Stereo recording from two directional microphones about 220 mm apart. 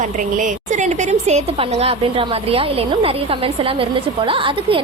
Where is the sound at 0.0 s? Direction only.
35° right (ahead or behind).